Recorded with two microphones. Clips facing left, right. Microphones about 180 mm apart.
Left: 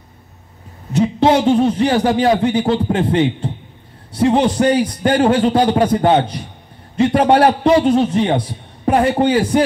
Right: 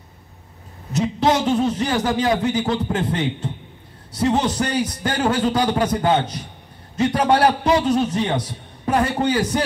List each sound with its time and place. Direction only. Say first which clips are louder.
0.9 s a man's voice: left 5 dB; 30° left (ahead or behind)